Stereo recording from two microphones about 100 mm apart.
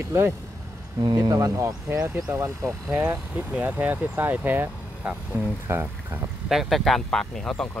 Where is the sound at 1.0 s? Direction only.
40° right (ahead or behind); by 2.5 s 20° right (ahead or behind).